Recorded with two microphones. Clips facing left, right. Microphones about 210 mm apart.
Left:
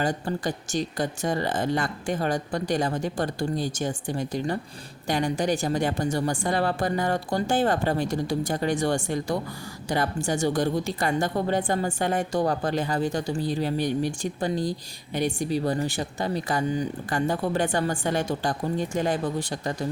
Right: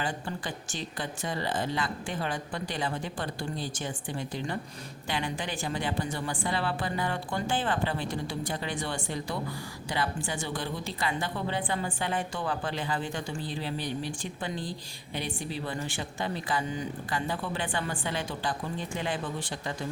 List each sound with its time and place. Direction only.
0.0 s a woman's voice: 40° left (ahead or behind)